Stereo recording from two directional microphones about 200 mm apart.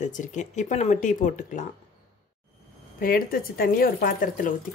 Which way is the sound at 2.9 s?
45° left (ahead or behind).